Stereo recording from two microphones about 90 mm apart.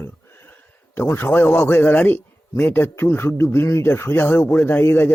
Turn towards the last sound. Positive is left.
turn(degrees=20)  # may be behind; listen again after turning